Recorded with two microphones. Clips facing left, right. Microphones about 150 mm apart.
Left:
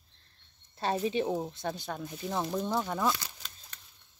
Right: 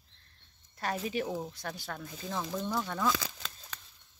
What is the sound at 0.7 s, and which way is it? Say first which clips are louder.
Speech: left 4 dB; 25° left (ahead or behind).